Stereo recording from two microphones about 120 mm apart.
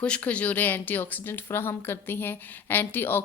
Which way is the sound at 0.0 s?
10° left (ahead or behind).